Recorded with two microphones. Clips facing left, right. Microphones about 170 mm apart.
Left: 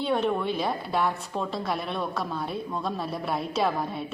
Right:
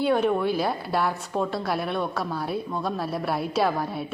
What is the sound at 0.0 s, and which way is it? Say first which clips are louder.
A woman's voice: right 4 dB; 5° right (ahead or behind).